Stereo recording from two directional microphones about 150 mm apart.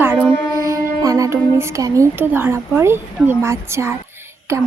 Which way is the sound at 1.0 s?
20° right (ahead or behind).